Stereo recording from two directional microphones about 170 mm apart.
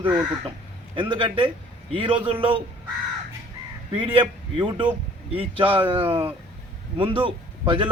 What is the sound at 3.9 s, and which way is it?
Speech, 30° right (ahead or behind).